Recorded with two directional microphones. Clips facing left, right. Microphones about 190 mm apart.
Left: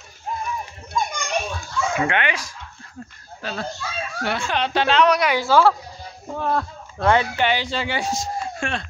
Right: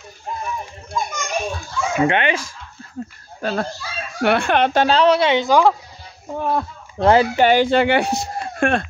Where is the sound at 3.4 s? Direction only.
50° right (ahead or behind).